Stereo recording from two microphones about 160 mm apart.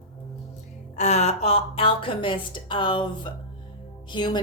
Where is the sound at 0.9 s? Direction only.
45° left (ahead or behind); by 4.4 s 30° left (ahead or behind).